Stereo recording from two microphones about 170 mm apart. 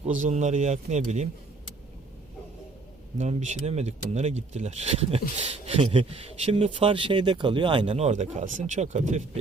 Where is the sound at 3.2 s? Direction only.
40° right (ahead or behind).